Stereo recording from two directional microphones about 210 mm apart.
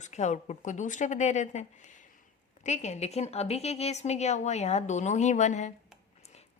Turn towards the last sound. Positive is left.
turn(degrees=35)  # may be behind; listen again after turning